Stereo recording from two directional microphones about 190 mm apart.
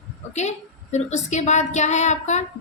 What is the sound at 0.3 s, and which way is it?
A woman's voice, 35° left (ahead or behind).